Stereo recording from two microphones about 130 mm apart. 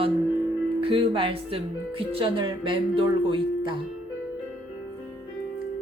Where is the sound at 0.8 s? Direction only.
45° right (ahead or behind).